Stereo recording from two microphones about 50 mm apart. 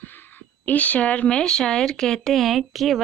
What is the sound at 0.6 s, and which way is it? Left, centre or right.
A woman's voice, left.